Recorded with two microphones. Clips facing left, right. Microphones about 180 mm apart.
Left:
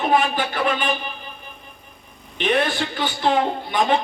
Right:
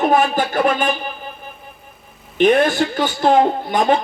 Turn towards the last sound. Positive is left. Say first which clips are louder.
# right 4 dB
turn(degrees=-45)  # may be behind; listen again after turning